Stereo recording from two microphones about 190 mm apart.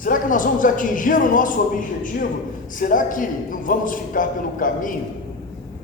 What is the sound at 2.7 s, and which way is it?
A man's voice, 45° left (ahead or behind).